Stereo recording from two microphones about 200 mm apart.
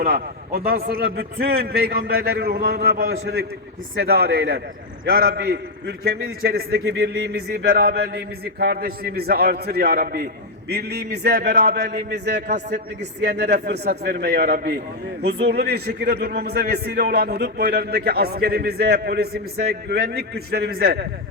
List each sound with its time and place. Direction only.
0.0 s a man's voice: 50° right (ahead or behind)